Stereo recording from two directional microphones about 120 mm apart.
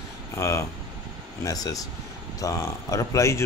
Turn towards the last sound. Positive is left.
turn(degrees=25)  # may be behind; listen again after turning